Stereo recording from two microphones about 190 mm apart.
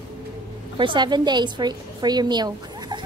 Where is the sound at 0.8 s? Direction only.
25° right (ahead or behind).